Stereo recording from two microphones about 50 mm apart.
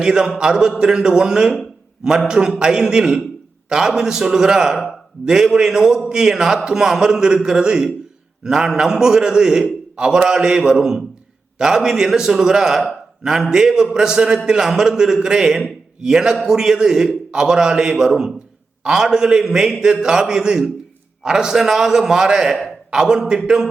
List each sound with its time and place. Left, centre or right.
0.0 s a man's voice: centre